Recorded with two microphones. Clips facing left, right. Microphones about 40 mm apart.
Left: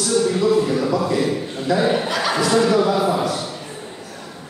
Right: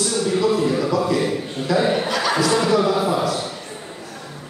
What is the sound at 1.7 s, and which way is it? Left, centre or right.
Chuckle, centre.